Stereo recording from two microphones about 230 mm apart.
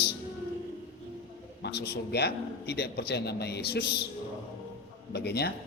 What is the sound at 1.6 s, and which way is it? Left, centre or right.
A man's voice, left.